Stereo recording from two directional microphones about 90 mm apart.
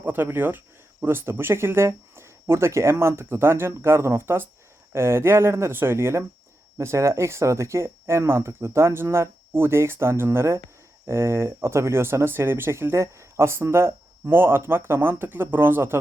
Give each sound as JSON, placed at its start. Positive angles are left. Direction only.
{"t": 0.0, "sound": "speech", "side_deg": -25}